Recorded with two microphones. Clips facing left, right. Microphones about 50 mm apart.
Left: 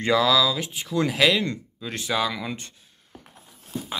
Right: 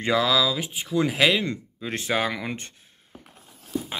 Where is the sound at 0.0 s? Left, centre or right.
Centre.